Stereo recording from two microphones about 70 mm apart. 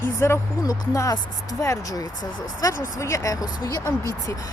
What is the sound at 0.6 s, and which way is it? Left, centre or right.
Speech, left.